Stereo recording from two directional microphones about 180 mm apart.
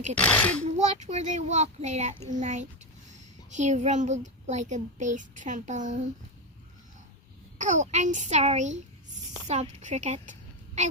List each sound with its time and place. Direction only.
0.2 s a child's voice: 10° left (ahead or behind)
0.6 s a child's voice: 40° right (ahead or behind)
7.6 s speech: 40° right (ahead or behind)